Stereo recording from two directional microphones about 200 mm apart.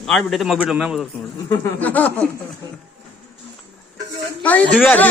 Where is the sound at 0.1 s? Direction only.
Centre (ahead or behind).